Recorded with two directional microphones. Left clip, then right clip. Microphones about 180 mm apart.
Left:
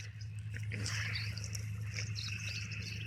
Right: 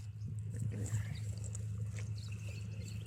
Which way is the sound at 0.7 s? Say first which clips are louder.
Left 11 dB; 20° right (ahead or behind).